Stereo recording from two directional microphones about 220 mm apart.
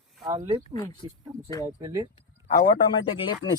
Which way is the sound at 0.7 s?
15° left (ahead or behind).